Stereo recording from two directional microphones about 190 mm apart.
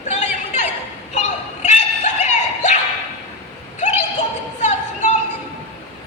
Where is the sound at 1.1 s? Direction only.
35° left (ahead or behind).